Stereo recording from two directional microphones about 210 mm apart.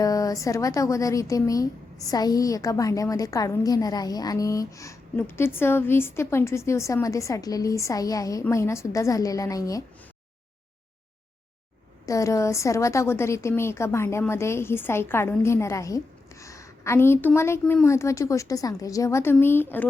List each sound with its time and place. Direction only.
0.0 s a woman's voice: 15° left (ahead or behind)
12.0 s a woman's voice: 15° left (ahead or behind)